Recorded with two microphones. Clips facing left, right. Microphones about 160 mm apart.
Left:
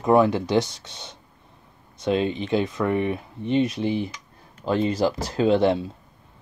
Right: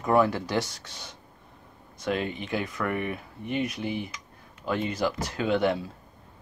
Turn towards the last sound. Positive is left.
turn(degrees=30)  # may be behind; listen again after turning